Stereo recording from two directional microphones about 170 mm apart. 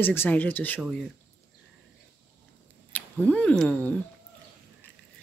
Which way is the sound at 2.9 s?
10° left (ahead or behind).